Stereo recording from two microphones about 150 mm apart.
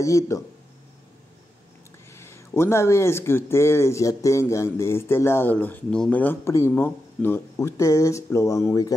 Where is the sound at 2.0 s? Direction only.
20° left (ahead or behind).